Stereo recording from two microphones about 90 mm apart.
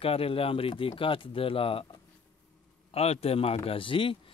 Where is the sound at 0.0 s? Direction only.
90° left.